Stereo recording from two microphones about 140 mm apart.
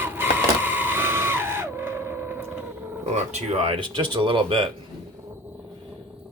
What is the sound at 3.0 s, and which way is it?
Speech, 55° right (ahead or behind).